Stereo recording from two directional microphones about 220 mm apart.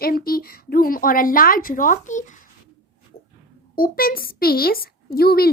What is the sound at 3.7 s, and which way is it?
Speech, 40° left (ahead or behind).